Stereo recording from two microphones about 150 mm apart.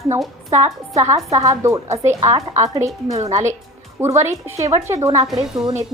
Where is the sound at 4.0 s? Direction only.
15° right (ahead or behind).